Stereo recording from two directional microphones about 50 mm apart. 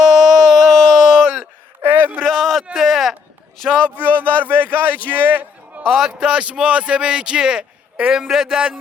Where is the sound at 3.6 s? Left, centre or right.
Centre.